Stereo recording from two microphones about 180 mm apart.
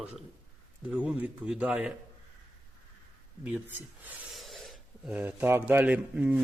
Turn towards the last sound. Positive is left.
turn(degrees=-10)  # may be behind; listen again after turning